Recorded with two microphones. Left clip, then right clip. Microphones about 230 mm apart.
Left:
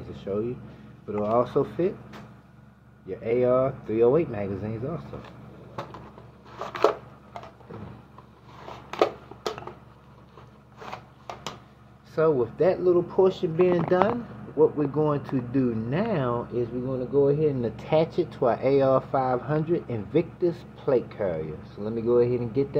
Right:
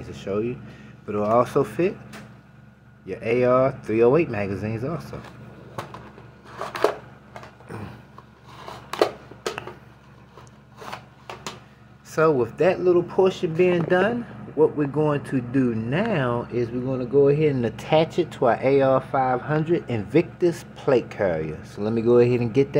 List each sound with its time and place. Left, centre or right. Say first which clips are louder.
0.1 s a sound: right 3 dB; centre
1.0 s speech: right 4 dB; right
3.1 s speech: right 3 dB; right
6.6 s chopping: even; centre
12.2 s speech: right 3 dB; right
16.8 s speech: right 4 dB; right